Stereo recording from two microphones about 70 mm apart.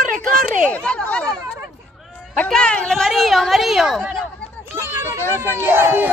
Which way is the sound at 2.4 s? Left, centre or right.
Centre.